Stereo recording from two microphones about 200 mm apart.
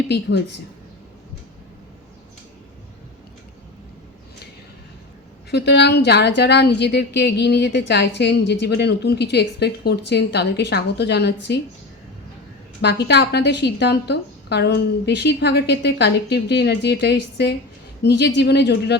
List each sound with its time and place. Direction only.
0.1 s a woman's voice: 60° left (ahead or behind)
5.5 s a woman's voice: 60° left (ahead or behind)
12.8 s a woman's voice: 55° left (ahead or behind)